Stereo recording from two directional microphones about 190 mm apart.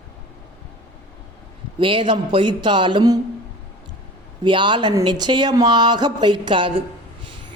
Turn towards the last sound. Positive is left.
turn(degrees=-25)  # may be behind; listen again after turning